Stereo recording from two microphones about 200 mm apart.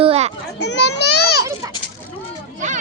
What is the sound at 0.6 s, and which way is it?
Speech, 60° left (ahead or behind).